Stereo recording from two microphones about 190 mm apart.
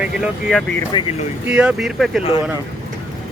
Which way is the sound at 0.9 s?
25° left (ahead or behind).